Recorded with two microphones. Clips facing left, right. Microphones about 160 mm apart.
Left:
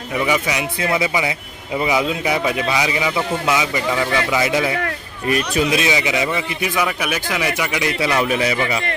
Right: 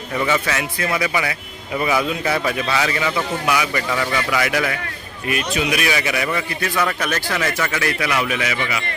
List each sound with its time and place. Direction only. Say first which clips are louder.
0.2 s a man's voice: left 1 dB; 15° left (ahead or behind)
0.8 s a man's voice: left 3 dB; 25° left (ahead or behind)
5.3 s speech: left 3 dB; 35° left (ahead or behind)
5.8 s a man's voice: left 2 dB; 20° left (ahead or behind)
7.9 s speech: left 3 dB; 30° left (ahead or behind)